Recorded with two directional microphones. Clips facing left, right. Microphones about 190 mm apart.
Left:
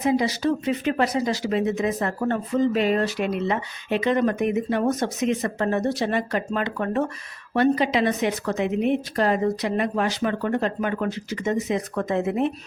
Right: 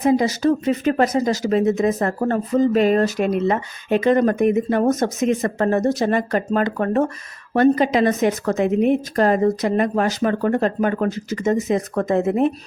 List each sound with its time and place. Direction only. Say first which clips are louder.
0.0 s speech: right 5 dB; 45° right (ahead or behind)